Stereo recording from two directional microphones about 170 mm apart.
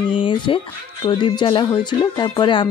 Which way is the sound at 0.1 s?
30° left (ahead or behind).